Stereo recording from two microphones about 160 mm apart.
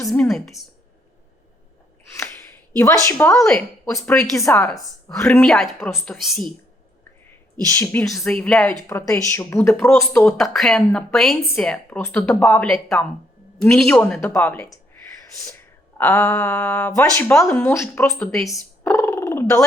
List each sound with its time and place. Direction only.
0.1 s speech: centre (ahead or behind)
2.1 s a sound: 15° left (ahead or behind)
3.3 s speech: 5° left (ahead or behind)
4.4 s a woman's voice: 20° left (ahead or behind)
4.6 s speech: 5° left (ahead or behind)
7.7 s speech: 15° left (ahead or behind)
8.2 s speech: 5° left (ahead or behind)
8.9 s speech: 15° left (ahead or behind)
10.3 s speech: centre (ahead or behind)
12.6 s speech: centre (ahead or behind)
18.4 s a sound: 15° left (ahead or behind)